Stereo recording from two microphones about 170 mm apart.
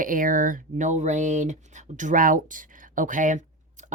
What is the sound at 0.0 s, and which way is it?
Speech, 50° right (ahead or behind).